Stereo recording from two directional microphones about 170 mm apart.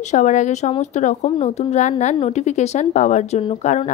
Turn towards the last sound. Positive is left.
turn(degrees=45)  # may be behind; listen again after turning